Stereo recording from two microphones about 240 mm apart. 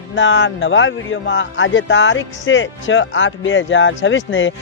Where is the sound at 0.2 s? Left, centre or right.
Left.